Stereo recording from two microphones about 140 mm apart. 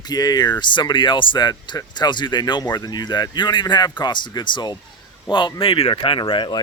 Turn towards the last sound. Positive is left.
turn(degrees=35)  # may be behind; listen again after turning